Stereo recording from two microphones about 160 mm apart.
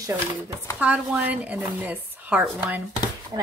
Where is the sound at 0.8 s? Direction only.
10° right (ahead or behind).